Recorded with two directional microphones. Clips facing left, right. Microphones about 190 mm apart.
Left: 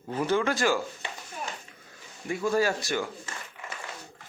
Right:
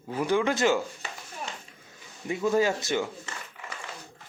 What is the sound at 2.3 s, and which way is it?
Speech, 20° right (ahead or behind).